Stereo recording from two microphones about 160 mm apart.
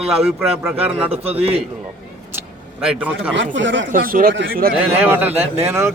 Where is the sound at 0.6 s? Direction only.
10° right (ahead or behind).